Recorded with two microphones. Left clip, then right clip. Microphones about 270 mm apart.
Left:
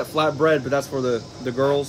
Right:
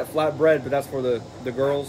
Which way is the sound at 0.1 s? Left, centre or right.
Left.